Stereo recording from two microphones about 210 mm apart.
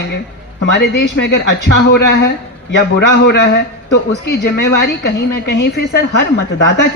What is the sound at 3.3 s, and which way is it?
A woman's voice, 55° left (ahead or behind).